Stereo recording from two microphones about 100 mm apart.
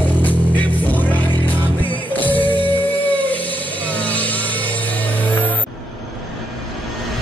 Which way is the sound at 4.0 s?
15° left (ahead or behind).